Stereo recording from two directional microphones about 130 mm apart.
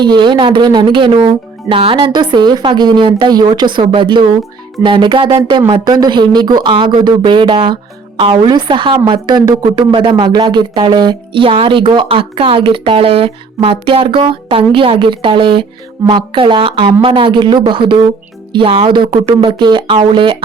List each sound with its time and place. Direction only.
0.0 s a woman's voice: 35° right (ahead or behind)